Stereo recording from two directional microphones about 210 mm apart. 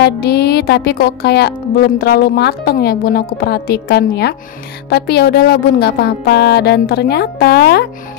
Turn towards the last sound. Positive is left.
turn(degrees=50)  # may be behind; listen again after turning